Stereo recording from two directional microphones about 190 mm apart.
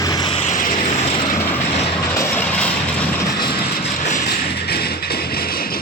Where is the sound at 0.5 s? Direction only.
45° left (ahead or behind).